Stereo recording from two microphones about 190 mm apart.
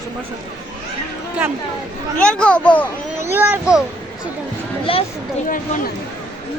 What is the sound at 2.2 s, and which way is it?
Speech, 5° left (ahead or behind).